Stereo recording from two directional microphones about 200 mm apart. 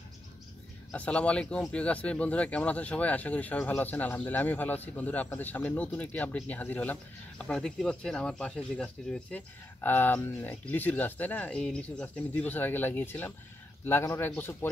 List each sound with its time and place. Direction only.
0.9 s speech: 5° left (ahead or behind)